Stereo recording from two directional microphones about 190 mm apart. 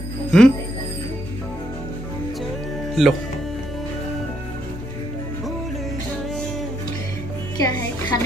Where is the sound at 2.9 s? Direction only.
Centre (ahead or behind).